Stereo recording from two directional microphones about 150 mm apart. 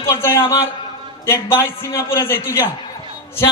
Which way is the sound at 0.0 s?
20° left (ahead or behind).